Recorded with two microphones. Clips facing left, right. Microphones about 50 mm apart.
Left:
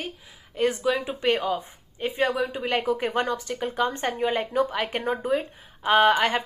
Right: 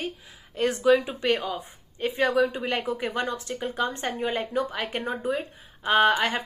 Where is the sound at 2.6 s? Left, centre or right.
Left.